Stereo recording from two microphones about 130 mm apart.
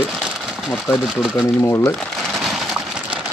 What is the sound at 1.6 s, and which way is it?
Speech, 20° left (ahead or behind).